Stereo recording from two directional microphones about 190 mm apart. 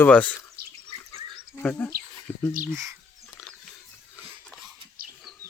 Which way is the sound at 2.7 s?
15° right (ahead or behind).